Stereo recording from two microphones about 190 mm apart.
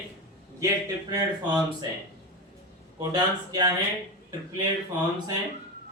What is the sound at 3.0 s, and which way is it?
Speech, 20° right (ahead or behind).